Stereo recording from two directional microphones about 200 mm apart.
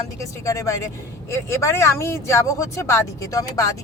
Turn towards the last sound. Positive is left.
turn(degrees=15)  # may be behind; listen again after turning